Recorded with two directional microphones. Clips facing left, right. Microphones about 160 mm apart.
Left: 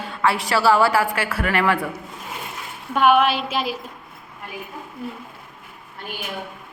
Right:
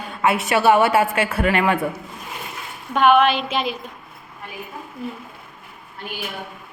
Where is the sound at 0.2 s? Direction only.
20° right (ahead or behind).